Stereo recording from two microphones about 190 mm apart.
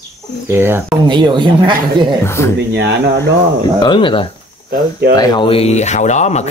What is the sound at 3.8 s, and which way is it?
Speech, 25° left (ahead or behind).